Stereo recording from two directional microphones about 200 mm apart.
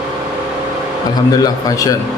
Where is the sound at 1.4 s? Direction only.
20° left (ahead or behind).